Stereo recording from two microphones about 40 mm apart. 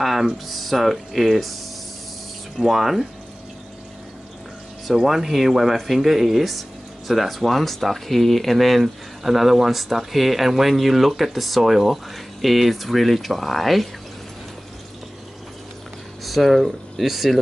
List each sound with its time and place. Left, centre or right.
0.0 s a sound: centre
0.5 s speech: centre
2.6 s speech: centre
5.0 s speech: centre
16.3 s speech: centre